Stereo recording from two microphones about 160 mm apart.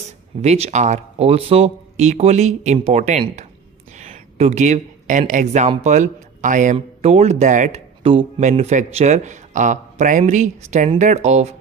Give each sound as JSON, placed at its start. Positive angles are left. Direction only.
{"t": 0.4, "sound": "a man's voice", "side_deg": -40}
{"t": 3.9, "sound": "a sound", "side_deg": -50}
{"t": 5.3, "sound": "a man's voice", "side_deg": -50}
{"t": 6.7, "sound": "a man's voice", "side_deg": -40}
{"t": 8.0, "sound": "speech", "side_deg": -35}
{"t": 8.4, "sound": "a man's voice", "side_deg": -45}